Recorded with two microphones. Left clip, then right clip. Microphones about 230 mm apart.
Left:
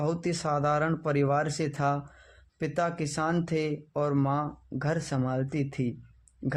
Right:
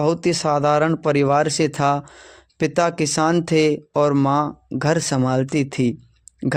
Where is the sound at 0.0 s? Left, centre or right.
Right.